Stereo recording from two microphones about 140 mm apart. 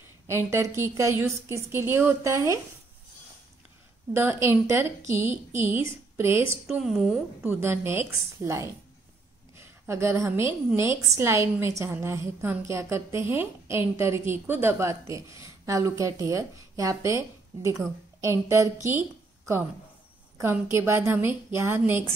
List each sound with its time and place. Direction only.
0.3 s a woman's voice: 20° right (ahead or behind)
4.1 s a woman's voice: 15° right (ahead or behind)
6.8 s a woman's voice: 5° right (ahead or behind)